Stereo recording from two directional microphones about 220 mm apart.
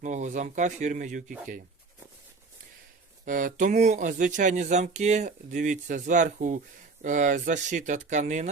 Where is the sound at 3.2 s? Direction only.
40° right (ahead or behind).